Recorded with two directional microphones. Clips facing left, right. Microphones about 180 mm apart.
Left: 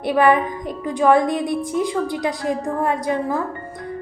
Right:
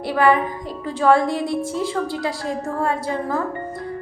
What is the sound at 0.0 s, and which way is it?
A woman's voice, 20° left (ahead or behind).